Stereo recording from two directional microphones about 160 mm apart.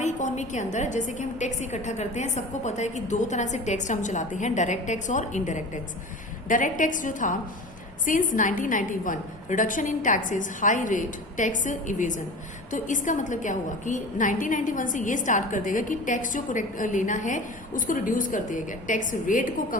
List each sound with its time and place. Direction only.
0.0 s a woman's voice: 50° left (ahead or behind)